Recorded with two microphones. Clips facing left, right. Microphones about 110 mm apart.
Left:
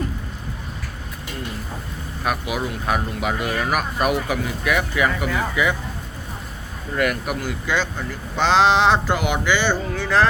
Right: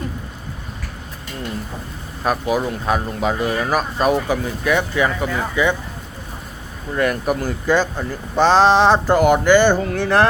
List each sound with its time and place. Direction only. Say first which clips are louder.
2.2 s speech: right 5 dB; 35° right (ahead or behind)
6.9 s speech: right 3 dB; 30° right (ahead or behind); by 10.2 s 55° right (ahead or behind)